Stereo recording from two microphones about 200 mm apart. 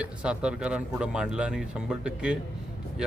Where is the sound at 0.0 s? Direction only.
5° right (ahead or behind).